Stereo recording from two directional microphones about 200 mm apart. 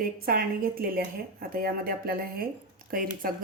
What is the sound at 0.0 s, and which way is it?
Speech, 45° right (ahead or behind).